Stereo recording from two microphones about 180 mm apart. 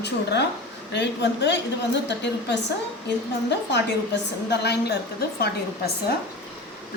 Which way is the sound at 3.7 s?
70° left (ahead or behind).